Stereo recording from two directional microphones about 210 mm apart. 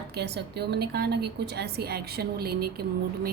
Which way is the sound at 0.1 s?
50° right (ahead or behind).